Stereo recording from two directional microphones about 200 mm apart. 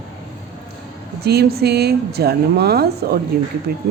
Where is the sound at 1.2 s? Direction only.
55° right (ahead or behind).